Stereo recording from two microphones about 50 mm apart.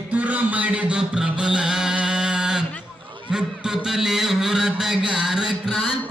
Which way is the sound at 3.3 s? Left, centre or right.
Centre.